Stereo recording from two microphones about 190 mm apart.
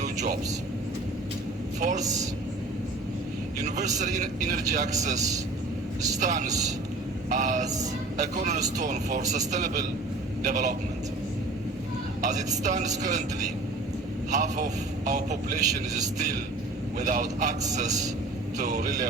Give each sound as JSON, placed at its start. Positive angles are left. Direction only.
{"t": 0.0, "sound": "vehicle", "side_deg": -40}
{"t": 1.8, "sound": "a man's voice", "side_deg": -40}
{"t": 3.8, "sound": "a man's voice", "side_deg": -40}
{"t": 12.2, "sound": "a man's voice", "side_deg": -40}
{"t": 14.3, "sound": "a man's voice", "side_deg": -40}
{"t": 17.0, "sound": "a man's voice", "side_deg": -40}
{"t": 18.5, "sound": "a man's voice", "side_deg": -40}